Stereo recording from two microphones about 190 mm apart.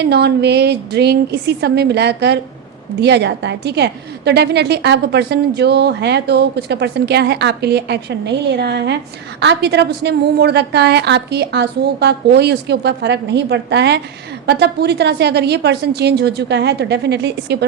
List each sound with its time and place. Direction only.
0.0 s a woman's voice: 60° right (ahead or behind)